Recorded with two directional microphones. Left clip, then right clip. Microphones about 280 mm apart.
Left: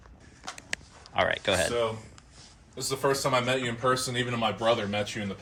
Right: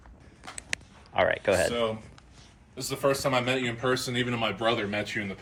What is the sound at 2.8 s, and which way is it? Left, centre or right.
Speech, centre.